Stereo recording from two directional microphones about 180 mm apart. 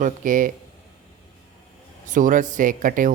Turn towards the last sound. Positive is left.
turn(degrees=-45)  # may be behind; listen again after turning